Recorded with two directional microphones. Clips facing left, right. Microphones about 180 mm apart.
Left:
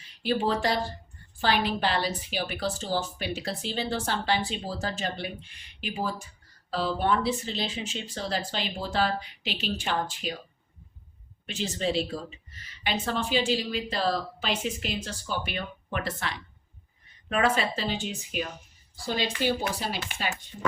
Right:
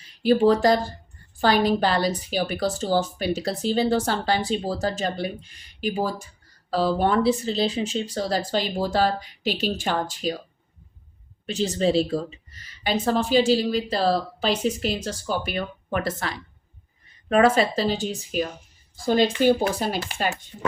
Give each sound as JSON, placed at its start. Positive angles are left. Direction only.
{"t": 0.0, "sound": "speech", "side_deg": -40}
{"t": 11.4, "sound": "speech", "side_deg": -35}